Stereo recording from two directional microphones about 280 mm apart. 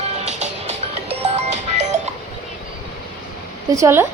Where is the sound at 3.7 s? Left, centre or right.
Centre.